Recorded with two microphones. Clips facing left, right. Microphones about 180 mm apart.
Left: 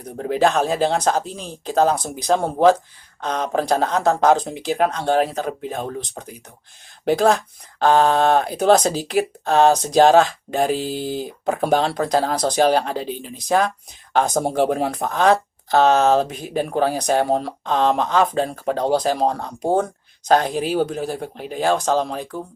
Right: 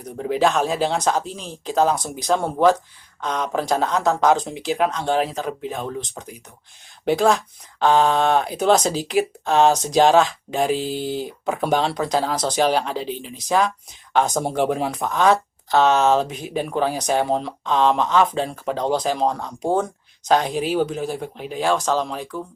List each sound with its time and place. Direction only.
0.2 s speech: 45° left (ahead or behind)
8.7 s speech: 55° left (ahead or behind)
12.5 s speech: 45° left (ahead or behind)
14.4 s speech: 40° left (ahead or behind)
15.1 s speech: 60° left (ahead or behind)
15.7 s speech: 35° left (ahead or behind)